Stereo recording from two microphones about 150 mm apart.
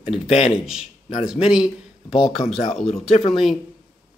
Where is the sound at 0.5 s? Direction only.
5° right (ahead or behind).